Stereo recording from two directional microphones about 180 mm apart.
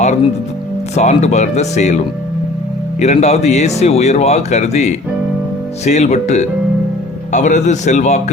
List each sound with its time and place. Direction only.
0.9 s speech: 40° left (ahead or behind)
3.0 s speech: 40° left (ahead or behind)